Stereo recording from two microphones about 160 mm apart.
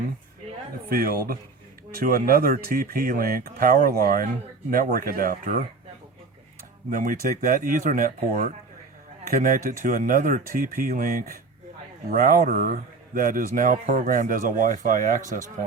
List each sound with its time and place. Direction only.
0.9 s speech: 70° right (ahead or behind)
6.9 s speech: 55° right (ahead or behind)